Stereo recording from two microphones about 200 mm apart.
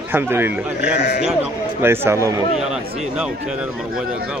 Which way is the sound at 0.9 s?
55° left (ahead or behind).